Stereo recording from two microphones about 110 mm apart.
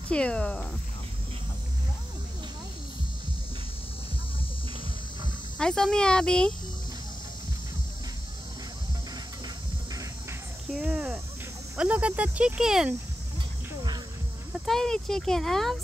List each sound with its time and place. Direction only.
0.1 s speech: 10° left (ahead or behind)
5.6 s speech: 5° left (ahead or behind)
10.8 s cricket: 15° right (ahead or behind)
11.7 s speech: 10° right (ahead or behind)
14.7 s speech: 5° left (ahead or behind)